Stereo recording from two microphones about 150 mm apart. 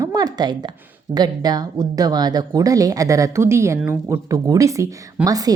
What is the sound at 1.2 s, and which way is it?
A woman's voice, 25° right (ahead or behind).